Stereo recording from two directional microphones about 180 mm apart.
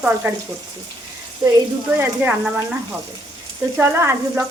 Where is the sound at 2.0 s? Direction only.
10° right (ahead or behind).